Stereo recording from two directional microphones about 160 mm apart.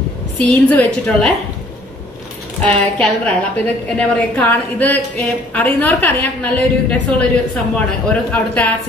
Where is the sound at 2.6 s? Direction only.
10° left (ahead or behind).